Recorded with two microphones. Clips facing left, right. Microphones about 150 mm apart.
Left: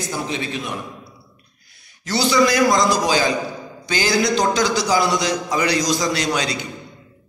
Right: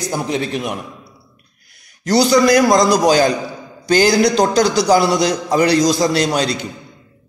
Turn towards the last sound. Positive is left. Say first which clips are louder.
# right 5 dB
turn(degrees=-35)  # may be behind; listen again after turning